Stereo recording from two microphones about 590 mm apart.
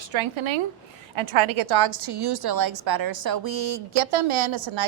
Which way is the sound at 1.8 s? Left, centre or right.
Right.